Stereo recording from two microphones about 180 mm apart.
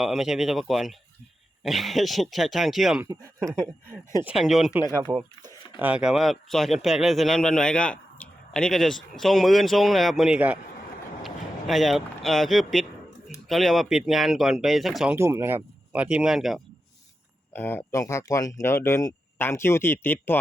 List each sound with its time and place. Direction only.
0.0 s speech: 5° right (ahead or behind)
3.0 s speech: 20° right (ahead or behind)
4.2 s speech: 5° right (ahead or behind)
4.8 s speech: 15° right (ahead or behind)
5.1 s speech: 25° right (ahead or behind)
5.8 s speech: 5° right (ahead or behind)
17.5 s speech: 10° left (ahead or behind)